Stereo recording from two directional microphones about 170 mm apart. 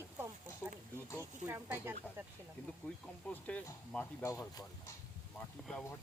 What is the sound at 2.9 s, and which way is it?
Speech, 10° left (ahead or behind).